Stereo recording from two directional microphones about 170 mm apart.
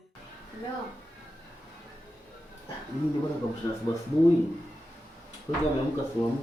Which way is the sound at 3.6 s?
20° left (ahead or behind).